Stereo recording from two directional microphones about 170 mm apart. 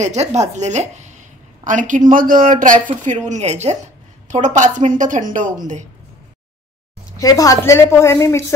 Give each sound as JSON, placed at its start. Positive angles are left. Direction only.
{"t": 0.0, "sound": "a woman's voice", "side_deg": -40}
{"t": 7.2, "sound": "a woman's voice", "side_deg": 20}